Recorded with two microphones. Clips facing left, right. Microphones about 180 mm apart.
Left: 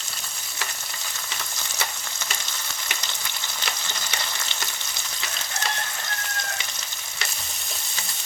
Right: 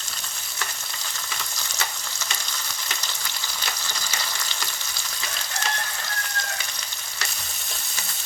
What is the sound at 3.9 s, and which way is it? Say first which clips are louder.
Frying: even; 20° left (ahead or behind).